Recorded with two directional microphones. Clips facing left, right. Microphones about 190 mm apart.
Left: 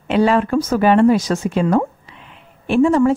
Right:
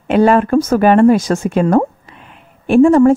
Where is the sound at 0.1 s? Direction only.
50° right (ahead or behind).